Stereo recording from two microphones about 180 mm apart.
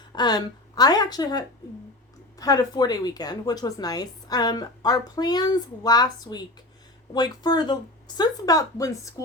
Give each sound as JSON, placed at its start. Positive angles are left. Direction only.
{"t": 0.1, "sound": "a woman's voice", "side_deg": 25}